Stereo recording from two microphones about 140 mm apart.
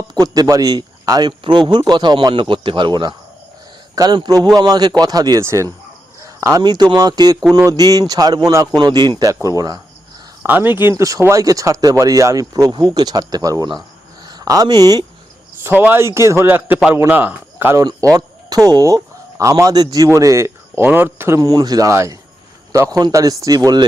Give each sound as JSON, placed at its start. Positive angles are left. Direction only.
{"t": 0.1, "sound": "speech", "side_deg": -25}
{"t": 6.2, "sound": "cricket", "side_deg": -20}
{"t": 6.9, "sound": "speech", "side_deg": -30}
{"t": 10.4, "sound": "speech", "side_deg": -15}
{"t": 15.6, "sound": "a man's voice", "side_deg": -15}